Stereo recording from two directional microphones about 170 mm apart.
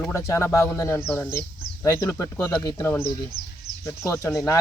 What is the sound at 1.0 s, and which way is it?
Speech, 5° left (ahead or behind).